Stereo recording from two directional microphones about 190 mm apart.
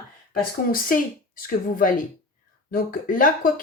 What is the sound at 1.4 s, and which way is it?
Speech, 45° left (ahead or behind).